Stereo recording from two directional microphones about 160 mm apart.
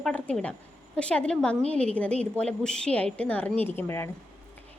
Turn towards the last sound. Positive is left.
turn(degrees=15)  # may be behind; listen again after turning